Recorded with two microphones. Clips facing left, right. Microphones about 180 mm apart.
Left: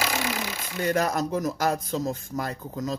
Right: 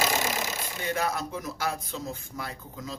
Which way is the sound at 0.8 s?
45° left (ahead or behind).